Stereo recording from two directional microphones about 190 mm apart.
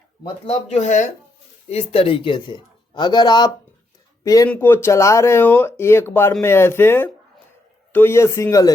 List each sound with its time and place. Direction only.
0.4 s a man's voice: 35° left (ahead or behind); by 8.7 s 15° left (ahead or behind)